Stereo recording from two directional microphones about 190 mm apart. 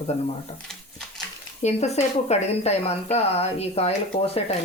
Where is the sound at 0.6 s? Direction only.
5° left (ahead or behind).